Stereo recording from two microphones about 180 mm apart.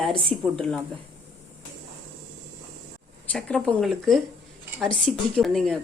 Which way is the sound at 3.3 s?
5° left (ahead or behind).